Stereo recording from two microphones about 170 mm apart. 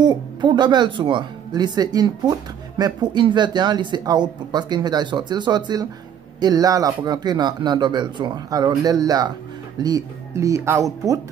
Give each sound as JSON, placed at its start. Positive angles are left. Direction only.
{"t": 0.0, "sound": "speech", "side_deg": -25}